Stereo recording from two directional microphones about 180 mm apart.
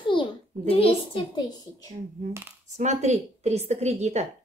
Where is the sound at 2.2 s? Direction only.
40° right (ahead or behind).